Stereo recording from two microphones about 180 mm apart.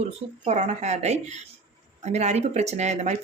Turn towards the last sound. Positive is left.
turn(degrees=-40)  # may be behind; listen again after turning